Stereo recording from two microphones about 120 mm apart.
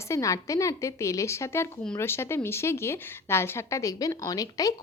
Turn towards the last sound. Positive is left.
turn(degrees=30)  # may be behind; listen again after turning